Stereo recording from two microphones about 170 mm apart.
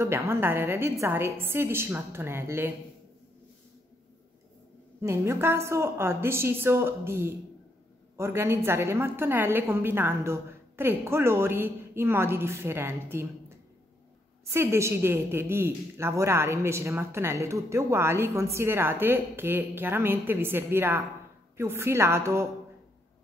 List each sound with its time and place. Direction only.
0.0 s a woman's voice: 15° right (ahead or behind)
5.0 s a woman's voice: 15° right (ahead or behind)